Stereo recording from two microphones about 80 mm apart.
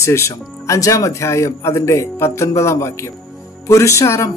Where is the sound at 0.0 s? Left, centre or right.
Left.